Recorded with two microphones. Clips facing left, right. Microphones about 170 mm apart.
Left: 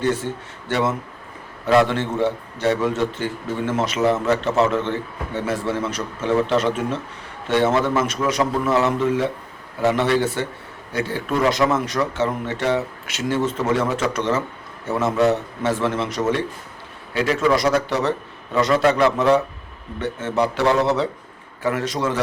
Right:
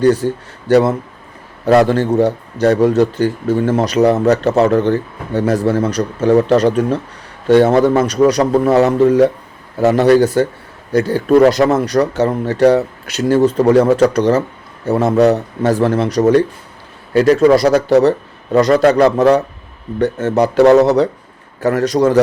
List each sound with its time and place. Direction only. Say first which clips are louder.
0.0 s a man's voice: right 9 dB; 35° right (ahead or behind)